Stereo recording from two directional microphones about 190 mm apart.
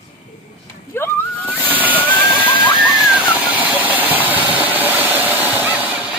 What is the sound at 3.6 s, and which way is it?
Engine, 10° right (ahead or behind).